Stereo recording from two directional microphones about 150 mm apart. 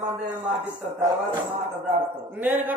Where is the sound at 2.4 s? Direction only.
10° right (ahead or behind).